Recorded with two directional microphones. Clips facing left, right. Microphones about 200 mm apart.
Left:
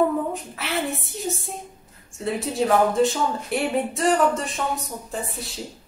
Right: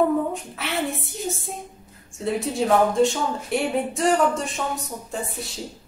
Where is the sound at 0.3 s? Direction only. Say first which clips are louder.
Left 1 dB; centre (ahead or behind).